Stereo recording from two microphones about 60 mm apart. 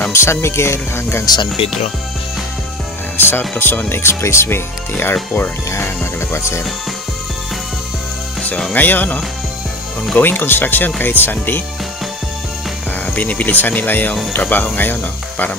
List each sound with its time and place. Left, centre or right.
0.1 s speech: left
3.2 s speech: left
6.1 s speech: left
8.7 s speech: left
12.9 s speech: left